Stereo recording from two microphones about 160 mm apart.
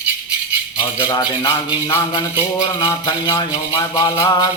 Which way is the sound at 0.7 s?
25° left (ahead or behind).